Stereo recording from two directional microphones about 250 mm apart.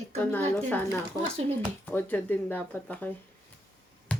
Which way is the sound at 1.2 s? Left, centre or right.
Right.